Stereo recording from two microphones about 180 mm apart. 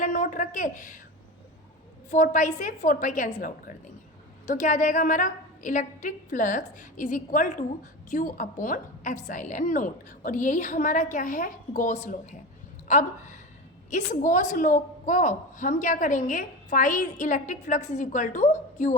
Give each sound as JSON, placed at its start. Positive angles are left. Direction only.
{"t": 0.0, "sound": "a woman's voice", "side_deg": 45}
{"t": 2.0, "sound": "a woman's voice", "side_deg": 45}